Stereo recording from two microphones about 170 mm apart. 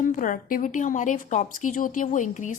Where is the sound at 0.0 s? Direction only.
50° left (ahead or behind).